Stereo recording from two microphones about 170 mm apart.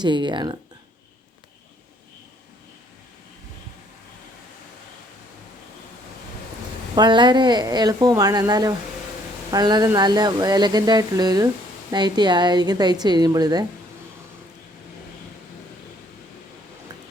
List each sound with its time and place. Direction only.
0.0 s speech: 25° right (ahead or behind)
6.9 s speech: 25° right (ahead or behind)